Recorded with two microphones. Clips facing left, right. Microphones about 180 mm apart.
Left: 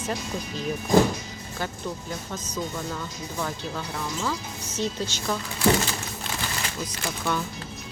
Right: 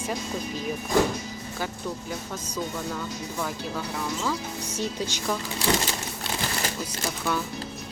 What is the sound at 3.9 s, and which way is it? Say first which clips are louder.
Speech: right 1 dB; 5° right (ahead or behind).